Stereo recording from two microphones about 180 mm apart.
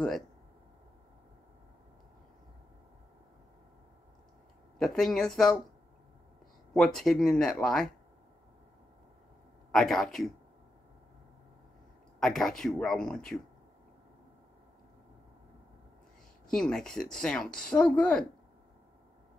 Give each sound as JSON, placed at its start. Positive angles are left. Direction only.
{"t": 4.7, "sound": "speech", "side_deg": 0}
{"t": 6.7, "sound": "speech", "side_deg": 0}
{"t": 9.7, "sound": "speech", "side_deg": 0}
{"t": 12.2, "sound": "speech", "side_deg": 0}
{"t": 16.4, "sound": "speech", "side_deg": 5}